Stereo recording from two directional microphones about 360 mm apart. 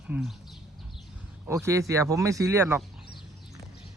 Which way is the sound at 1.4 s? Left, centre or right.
Centre.